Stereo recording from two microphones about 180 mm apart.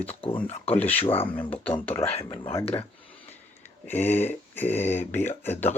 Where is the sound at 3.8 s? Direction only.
10° left (ahead or behind).